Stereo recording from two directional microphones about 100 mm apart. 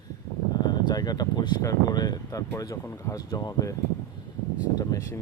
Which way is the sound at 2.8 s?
30° left (ahead or behind).